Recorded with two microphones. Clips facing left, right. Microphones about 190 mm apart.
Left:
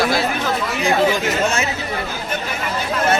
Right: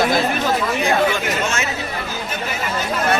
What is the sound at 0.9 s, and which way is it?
Speech, 35° left (ahead or behind).